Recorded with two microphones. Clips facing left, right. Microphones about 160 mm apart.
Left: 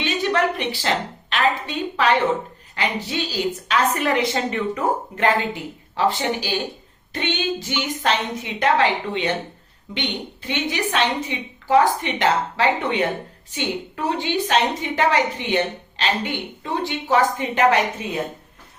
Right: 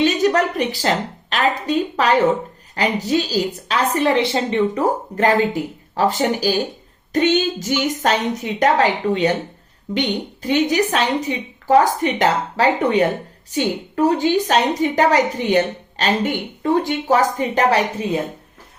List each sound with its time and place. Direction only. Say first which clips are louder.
0.0 s a woman's voice: right 5 dB; 40° right (ahead or behind)